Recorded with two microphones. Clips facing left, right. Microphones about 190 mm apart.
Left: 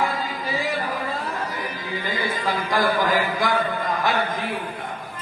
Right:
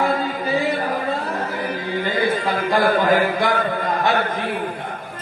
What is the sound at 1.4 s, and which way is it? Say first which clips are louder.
Music: right 5 dB; 60° right (ahead or behind).